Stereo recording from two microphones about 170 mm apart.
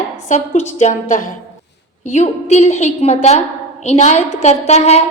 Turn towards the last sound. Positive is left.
turn(degrees=40)  # may be behind; listen again after turning